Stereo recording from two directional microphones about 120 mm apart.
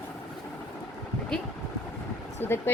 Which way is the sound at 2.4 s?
20° left (ahead or behind).